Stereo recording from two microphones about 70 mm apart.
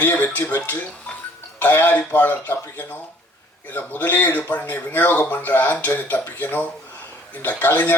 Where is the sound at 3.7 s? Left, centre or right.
Left.